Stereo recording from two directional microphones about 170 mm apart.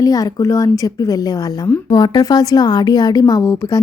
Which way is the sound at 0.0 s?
20° left (ahead or behind).